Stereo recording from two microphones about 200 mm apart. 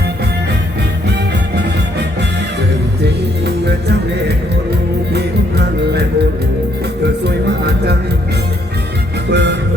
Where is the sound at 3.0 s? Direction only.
55° right (ahead or behind).